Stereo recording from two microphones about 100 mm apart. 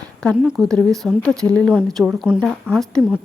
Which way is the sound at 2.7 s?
5° left (ahead or behind).